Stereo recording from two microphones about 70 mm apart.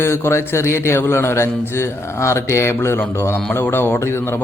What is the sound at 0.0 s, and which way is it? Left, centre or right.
A man's voice, left.